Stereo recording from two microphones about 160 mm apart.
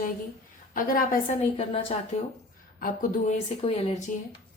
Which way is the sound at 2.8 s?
55° left (ahead or behind).